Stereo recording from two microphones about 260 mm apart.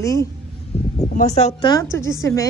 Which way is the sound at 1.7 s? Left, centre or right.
Centre.